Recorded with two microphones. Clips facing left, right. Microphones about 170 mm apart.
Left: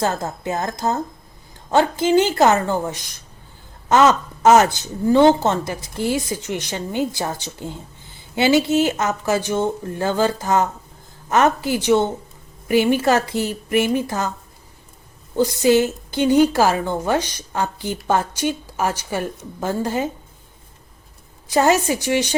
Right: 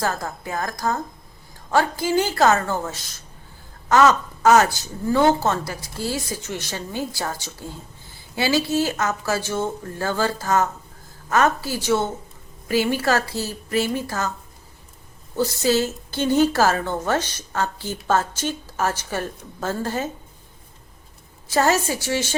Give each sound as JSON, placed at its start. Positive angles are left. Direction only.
{"t": 0.0, "sound": "speech", "side_deg": 25}
{"t": 15.4, "sound": "a woman's voice", "side_deg": 15}
{"t": 21.4, "sound": "a woman's voice", "side_deg": 15}